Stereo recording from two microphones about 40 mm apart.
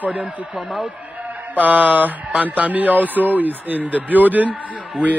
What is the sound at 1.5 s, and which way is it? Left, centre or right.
A man's voice, right.